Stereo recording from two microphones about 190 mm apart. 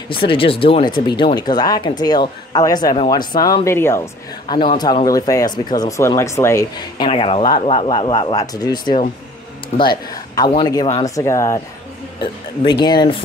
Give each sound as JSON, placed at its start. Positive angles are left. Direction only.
{"t": 0.1, "sound": "speech", "side_deg": 30}
{"t": 12.8, "sound": "speech", "side_deg": 25}